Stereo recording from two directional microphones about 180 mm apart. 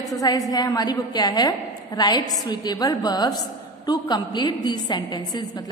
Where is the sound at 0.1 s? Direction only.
20° left (ahead or behind).